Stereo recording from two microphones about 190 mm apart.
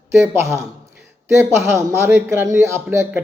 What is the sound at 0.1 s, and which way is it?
A man's voice, 15° right (ahead or behind).